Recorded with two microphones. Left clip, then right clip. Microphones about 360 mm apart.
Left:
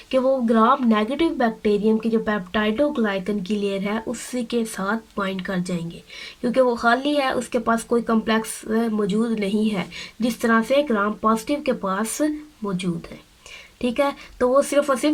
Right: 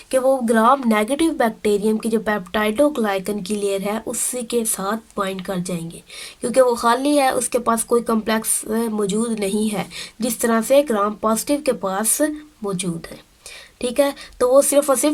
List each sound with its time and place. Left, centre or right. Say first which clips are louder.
0.1 s speech: right 2 dB; centre
13.8 s speech: right 3 dB; centre